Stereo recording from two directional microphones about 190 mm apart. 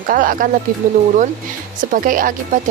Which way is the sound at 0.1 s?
45° right (ahead or behind).